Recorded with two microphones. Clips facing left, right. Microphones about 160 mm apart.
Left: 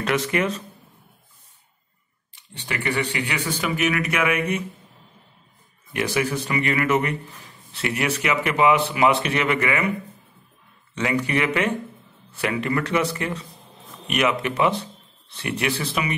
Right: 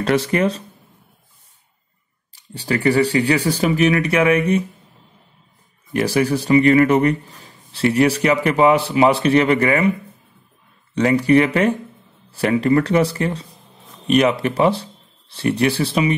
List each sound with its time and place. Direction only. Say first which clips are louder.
0.0 s speech: right 5 dB; 35° right (ahead or behind)
2.3 s speech: right 9 dB; 35° right (ahead or behind)
5.9 s speech: right 6 dB; 35° right (ahead or behind)
11.0 s speech: right 9 dB; 35° right (ahead or behind)